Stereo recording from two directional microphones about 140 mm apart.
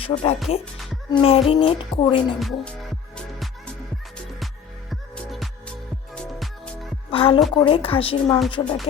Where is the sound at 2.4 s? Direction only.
Centre (ahead or behind).